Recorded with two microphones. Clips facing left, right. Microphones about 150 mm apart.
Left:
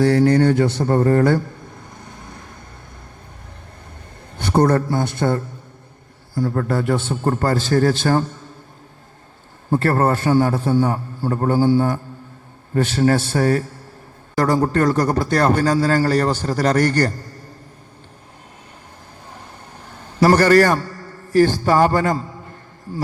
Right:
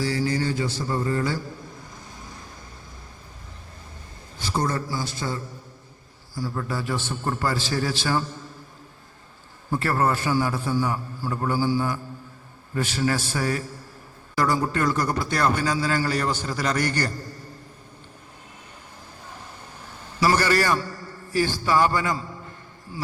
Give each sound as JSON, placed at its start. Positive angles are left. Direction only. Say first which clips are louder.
{"t": 0.0, "sound": "a man's voice", "louder": "left 11 dB", "side_deg": 60}
{"t": 4.4, "sound": "a man's voice", "louder": "left 10 dB", "side_deg": 60}
{"t": 9.6, "sound": "a man's voice", "louder": "left 6 dB", "side_deg": 50}
{"t": 14.7, "sound": "a man's voice", "louder": "left 7 dB", "side_deg": 40}
{"t": 20.1, "sound": "a man's voice", "louder": "left 9 dB", "side_deg": 50}